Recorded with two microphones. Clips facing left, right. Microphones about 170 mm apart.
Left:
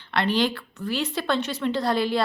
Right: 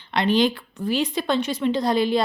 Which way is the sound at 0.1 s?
20° right (ahead or behind).